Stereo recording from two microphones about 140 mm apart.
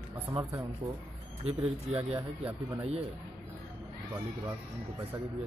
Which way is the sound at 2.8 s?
45° right (ahead or behind).